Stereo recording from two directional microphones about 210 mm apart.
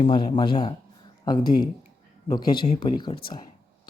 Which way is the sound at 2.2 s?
20° left (ahead or behind).